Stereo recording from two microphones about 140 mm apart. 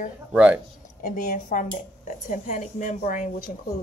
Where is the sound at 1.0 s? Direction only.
70° left (ahead or behind).